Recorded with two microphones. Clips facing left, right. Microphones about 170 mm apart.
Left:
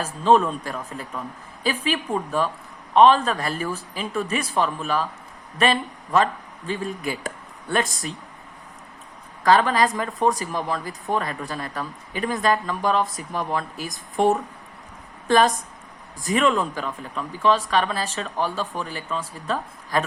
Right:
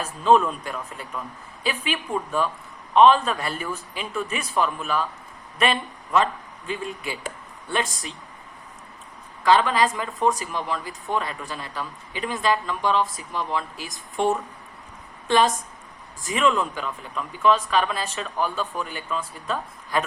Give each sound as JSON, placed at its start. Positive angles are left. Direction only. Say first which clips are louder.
{"t": 0.0, "sound": "speech", "louder": "left 1 dB", "side_deg": 35}
{"t": 9.4, "sound": "speech", "louder": "left 1 dB", "side_deg": 45}
{"t": 16.2, "sound": "speech", "louder": "left 2 dB", "side_deg": 40}